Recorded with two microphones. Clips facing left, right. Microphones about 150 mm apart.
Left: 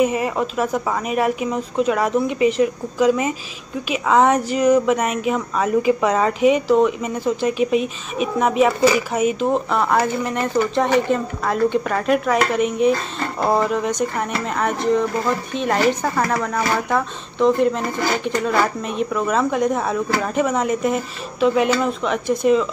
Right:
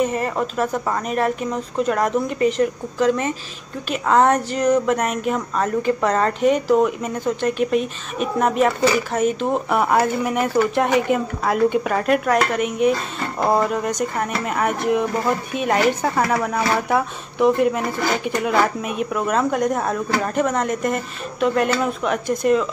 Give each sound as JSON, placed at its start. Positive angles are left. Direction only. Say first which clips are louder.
{"t": 0.0, "sound": "speech", "louder": "left 2 dB", "side_deg": 5}
{"t": 9.7, "sound": "speech", "louder": "right 1 dB", "side_deg": -10}